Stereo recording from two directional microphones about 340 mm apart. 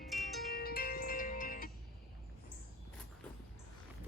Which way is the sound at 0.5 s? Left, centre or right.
Left.